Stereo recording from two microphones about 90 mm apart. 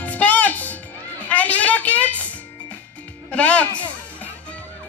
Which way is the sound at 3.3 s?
15° left (ahead or behind).